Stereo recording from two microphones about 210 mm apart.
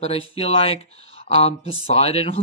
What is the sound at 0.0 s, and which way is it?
Speech, 30° left (ahead or behind).